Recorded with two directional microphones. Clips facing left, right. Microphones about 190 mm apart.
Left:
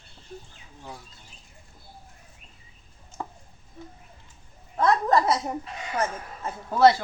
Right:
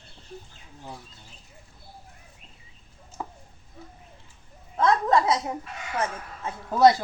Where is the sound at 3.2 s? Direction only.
5° right (ahead or behind).